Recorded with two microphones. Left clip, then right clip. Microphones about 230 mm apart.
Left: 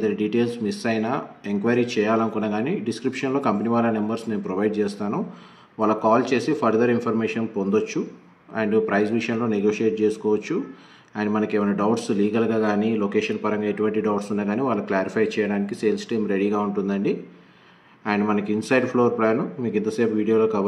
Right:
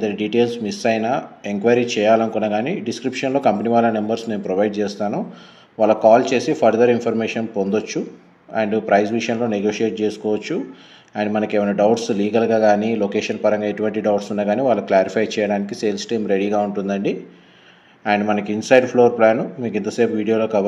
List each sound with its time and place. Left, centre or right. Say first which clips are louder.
0.0 s speech: right 4 dB; centre